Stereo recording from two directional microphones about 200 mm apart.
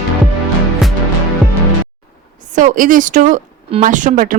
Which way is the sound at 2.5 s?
40° right (ahead or behind).